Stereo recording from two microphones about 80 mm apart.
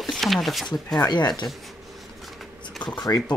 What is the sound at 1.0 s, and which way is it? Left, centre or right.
Speech, left.